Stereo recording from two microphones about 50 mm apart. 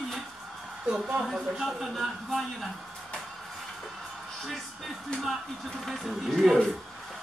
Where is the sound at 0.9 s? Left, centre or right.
Right.